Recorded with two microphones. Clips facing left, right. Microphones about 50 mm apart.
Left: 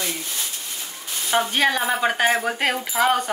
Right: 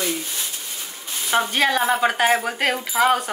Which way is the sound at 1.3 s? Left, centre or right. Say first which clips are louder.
Even; centre.